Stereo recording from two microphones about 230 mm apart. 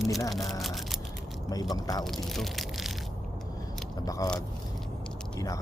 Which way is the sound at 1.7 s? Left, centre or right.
Centre.